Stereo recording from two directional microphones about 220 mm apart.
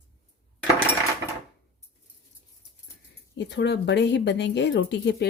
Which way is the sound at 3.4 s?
50° left (ahead or behind).